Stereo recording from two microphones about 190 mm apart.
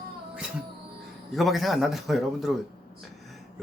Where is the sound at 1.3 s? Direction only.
Centre (ahead or behind).